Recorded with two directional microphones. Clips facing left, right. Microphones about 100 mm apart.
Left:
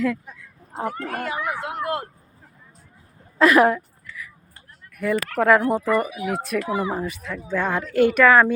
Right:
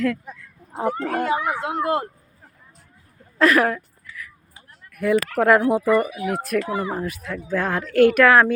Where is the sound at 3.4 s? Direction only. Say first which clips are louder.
Left 2 dB; 10° left (ahead or behind).